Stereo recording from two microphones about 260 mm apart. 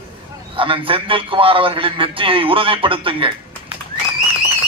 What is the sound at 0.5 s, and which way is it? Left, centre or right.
A man's voice, centre.